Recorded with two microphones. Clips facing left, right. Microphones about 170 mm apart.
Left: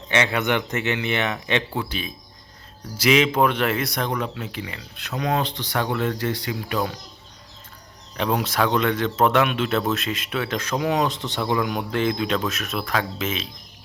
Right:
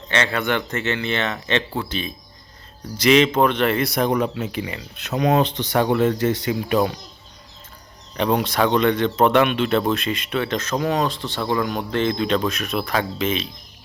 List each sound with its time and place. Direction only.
0.1 s speech: 15° left (ahead or behind); by 4.1 s 5° right (ahead or behind)
4.1 s speech: 20° right (ahead or behind)
8.1 s speech: centre (ahead or behind)